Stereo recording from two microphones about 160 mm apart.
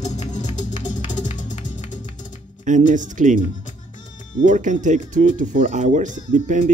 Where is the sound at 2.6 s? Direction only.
50° right (ahead or behind).